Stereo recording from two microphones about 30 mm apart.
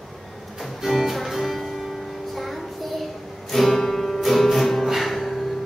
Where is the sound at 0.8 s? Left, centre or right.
Centre.